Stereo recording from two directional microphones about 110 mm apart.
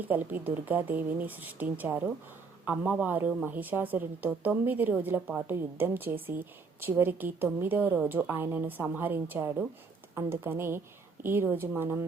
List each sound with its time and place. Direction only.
0.0 s a woman's voice: 15° right (ahead or behind)